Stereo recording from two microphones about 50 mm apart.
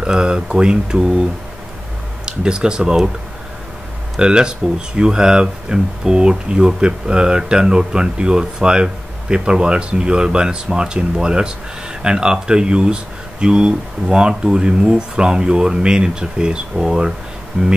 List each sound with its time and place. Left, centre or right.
0.0 s speech: centre
2.2 s speech: centre
4.2 s speech: centre